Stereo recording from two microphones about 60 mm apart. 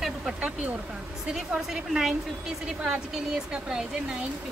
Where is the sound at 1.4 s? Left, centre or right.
Centre.